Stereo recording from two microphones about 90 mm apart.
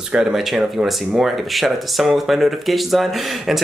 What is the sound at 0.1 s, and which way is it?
Speech, 5° right (ahead or behind).